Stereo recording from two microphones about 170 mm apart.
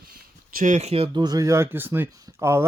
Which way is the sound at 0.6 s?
45° right (ahead or behind).